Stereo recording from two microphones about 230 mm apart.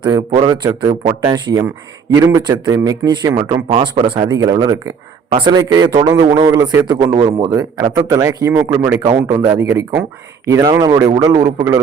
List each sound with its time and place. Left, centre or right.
0.0 s a man's voice: centre